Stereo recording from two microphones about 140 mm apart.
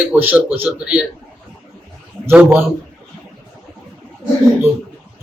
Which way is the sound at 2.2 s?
15° right (ahead or behind).